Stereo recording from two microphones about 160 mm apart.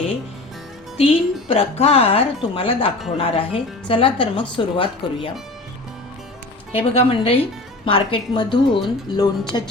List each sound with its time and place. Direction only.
0.9 s speech: 35° left (ahead or behind)
6.9 s speech: 35° left (ahead or behind)